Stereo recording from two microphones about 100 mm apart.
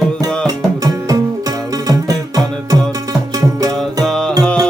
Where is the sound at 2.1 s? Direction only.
35° right (ahead or behind).